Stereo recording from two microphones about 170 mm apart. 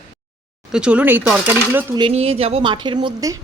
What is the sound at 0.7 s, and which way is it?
Speech, 5° right (ahead or behind).